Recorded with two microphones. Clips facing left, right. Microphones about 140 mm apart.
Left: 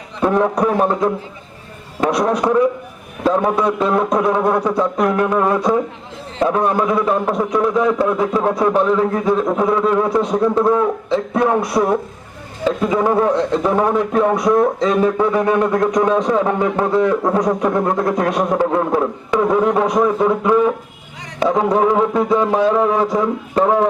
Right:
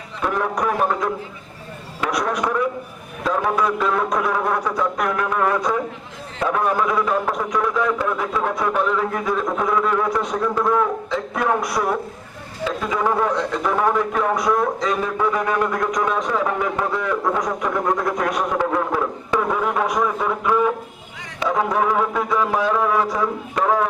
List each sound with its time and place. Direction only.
0.2 s a man's voice: 30° left (ahead or behind)